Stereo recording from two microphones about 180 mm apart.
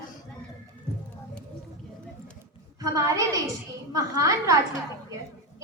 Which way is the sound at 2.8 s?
20° right (ahead or behind).